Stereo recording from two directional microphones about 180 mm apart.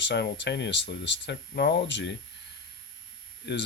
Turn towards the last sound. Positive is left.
turn(degrees=70)  # may be behind; listen again after turning